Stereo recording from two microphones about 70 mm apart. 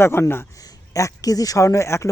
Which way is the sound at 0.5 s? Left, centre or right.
Left.